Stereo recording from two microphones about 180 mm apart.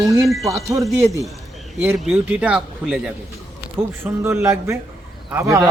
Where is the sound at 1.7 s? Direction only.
5° right (ahead or behind).